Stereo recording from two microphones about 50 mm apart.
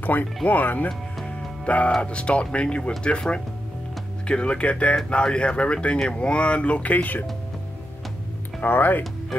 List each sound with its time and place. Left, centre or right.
0.1 s speech: left
0.8 s music: left
2.0 s speech: left
8.5 s speech: left